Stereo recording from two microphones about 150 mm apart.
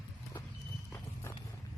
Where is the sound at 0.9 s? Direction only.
15° left (ahead or behind).